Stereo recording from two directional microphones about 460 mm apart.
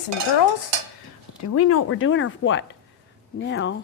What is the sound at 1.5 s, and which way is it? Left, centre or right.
Speech, left.